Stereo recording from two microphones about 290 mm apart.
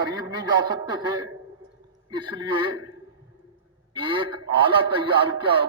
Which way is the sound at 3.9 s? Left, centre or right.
Centre.